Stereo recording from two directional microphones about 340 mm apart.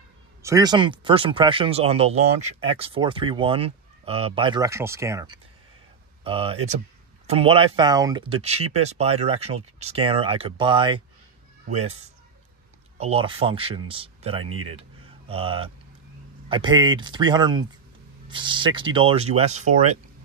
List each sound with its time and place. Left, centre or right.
0.4 s a man's voice: centre
14.4 s speech: right
14.8 s a sound: centre
16.4 s speech: centre